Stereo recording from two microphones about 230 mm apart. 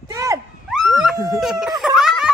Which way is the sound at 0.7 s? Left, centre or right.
Centre.